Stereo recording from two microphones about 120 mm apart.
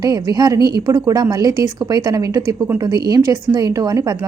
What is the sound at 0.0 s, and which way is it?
A woman's voice, 35° right (ahead or behind).